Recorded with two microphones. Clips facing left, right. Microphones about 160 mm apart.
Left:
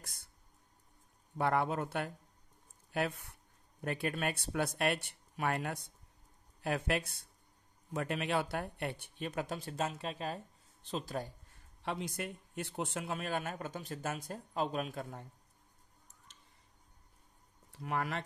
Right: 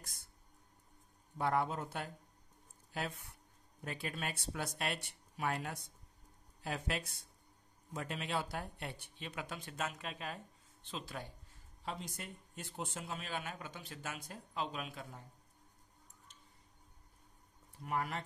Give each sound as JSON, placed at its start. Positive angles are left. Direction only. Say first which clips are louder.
{"t": 1.4, "sound": "speech", "louder": "left 3 dB", "side_deg": 65}
{"t": 11.8, "sound": "speech", "louder": "left 6 dB", "side_deg": 70}
{"t": 17.7, "sound": "speech", "louder": "left 2 dB", "side_deg": 85}